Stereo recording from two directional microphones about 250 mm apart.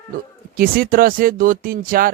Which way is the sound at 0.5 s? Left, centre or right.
Right.